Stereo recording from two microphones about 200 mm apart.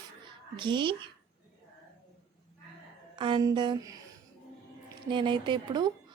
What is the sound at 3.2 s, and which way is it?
A woman's voice, 25° right (ahead or behind).